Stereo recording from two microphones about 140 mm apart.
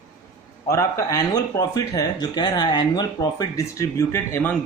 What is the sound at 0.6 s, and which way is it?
Speech, 20° left (ahead or behind).